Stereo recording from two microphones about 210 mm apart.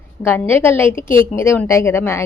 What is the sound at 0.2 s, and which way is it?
Speech, 10° left (ahead or behind).